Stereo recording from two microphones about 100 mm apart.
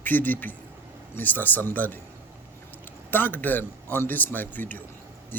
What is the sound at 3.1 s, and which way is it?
A man's voice, 20° left (ahead or behind).